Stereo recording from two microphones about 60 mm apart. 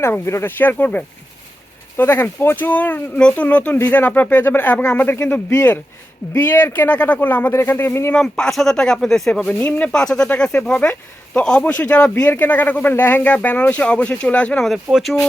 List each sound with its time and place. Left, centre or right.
0.0 s speech: left
0.4 s speech: left
4.8 s speech: left
8.1 s speech: centre
9.6 s speech: left
12.2 s speech: left
14.9 s speech: centre